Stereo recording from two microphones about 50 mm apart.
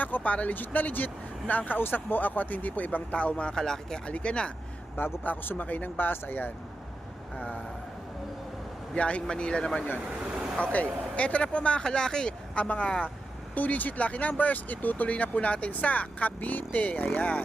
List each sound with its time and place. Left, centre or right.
0.0 s speech: left
3.6 s speech: centre
4.0 s speech: left
5.2 s speech: left
7.3 s speech: left
9.0 s speech: left
10.6 s speech: left
12.5 s speech: left